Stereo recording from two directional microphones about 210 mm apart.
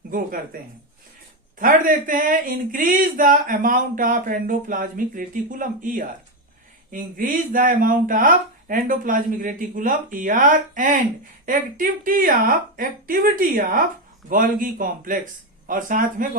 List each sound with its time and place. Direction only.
0.1 s speech: 40° right (ahead or behind)
1.5 s speech: 40° right (ahead or behind)